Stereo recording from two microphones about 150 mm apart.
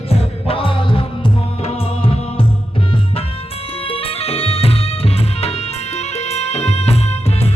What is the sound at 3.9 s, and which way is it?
Music, 40° left (ahead or behind).